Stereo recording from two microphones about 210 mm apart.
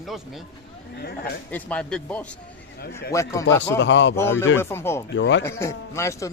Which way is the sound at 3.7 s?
60° left (ahead or behind).